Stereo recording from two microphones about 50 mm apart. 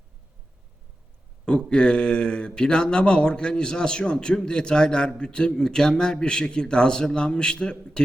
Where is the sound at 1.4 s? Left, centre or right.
Centre.